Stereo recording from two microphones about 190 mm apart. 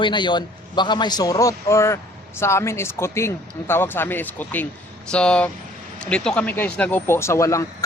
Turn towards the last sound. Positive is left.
turn(degrees=15)  # may be behind; listen again after turning